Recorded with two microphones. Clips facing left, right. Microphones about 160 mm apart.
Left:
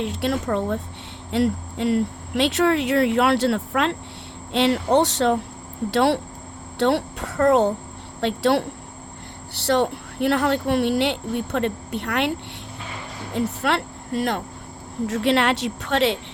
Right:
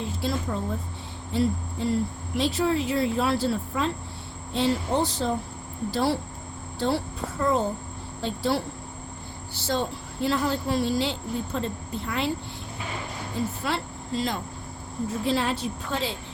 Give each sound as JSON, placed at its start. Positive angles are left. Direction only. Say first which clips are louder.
{"t": 0.0, "sound": "speech", "louder": "left 5 dB", "side_deg": 70}
{"t": 13.3, "sound": "speech", "louder": "left 6 dB", "side_deg": 70}
{"t": 15.0, "sound": "speech", "louder": "left 6 dB", "side_deg": 80}